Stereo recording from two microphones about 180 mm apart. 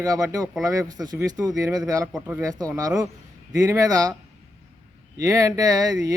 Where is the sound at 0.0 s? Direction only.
20° right (ahead or behind).